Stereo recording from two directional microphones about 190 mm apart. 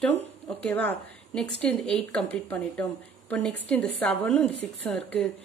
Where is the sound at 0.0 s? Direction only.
10° left (ahead or behind).